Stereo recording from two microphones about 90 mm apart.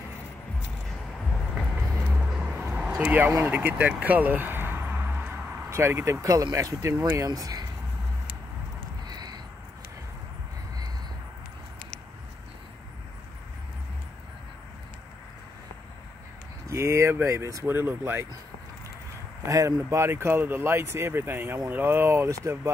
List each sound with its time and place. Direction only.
1.8 s vehicle: 5° left (ahead or behind)
2.2 s vehicle: 10° right (ahead or behind)
2.6 s a sound: 15° right (ahead or behind)
3.1 s speech: 15° right (ahead or behind)
6.2 s speech: 45° right (ahead or behind)
9.0 s a sound: 50° right (ahead or behind)
16.6 s speech: 35° right (ahead or behind)
17.6 s speech: 25° right (ahead or behind)
19.4 s speech: 35° right (ahead or behind)
22.3 s speech: 35° right (ahead or behind)